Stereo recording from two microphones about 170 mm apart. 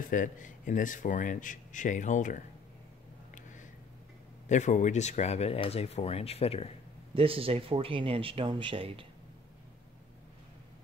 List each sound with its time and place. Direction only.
0.0 s speech: 50° left (ahead or behind)
4.5 s speech: 45° left (ahead or behind)
7.2 s speech: 35° right (ahead or behind)